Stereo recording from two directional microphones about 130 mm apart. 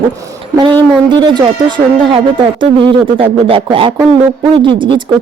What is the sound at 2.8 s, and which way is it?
Speech, 45° right (ahead or behind).